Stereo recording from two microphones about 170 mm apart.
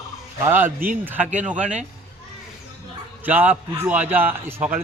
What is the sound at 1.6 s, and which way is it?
Speech, 45° right (ahead or behind).